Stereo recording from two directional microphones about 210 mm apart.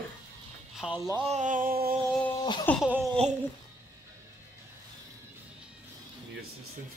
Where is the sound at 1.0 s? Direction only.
25° right (ahead or behind); by 1.9 s 45° right (ahead or behind).